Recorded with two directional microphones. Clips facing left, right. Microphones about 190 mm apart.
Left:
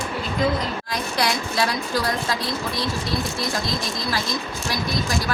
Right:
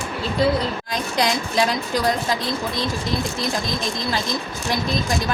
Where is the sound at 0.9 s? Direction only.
20° right (ahead or behind).